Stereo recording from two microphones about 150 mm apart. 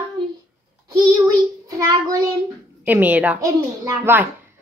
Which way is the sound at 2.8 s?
10° right (ahead or behind).